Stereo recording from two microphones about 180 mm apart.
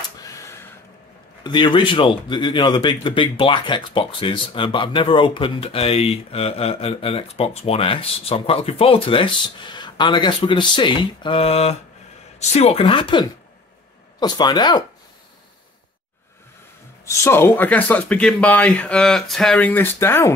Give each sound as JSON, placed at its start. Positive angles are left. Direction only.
{"t": 0.2, "sound": "a sound", "side_deg": 20}
{"t": 1.4, "sound": "speech", "side_deg": 25}
{"t": 17.0, "sound": "speech", "side_deg": 15}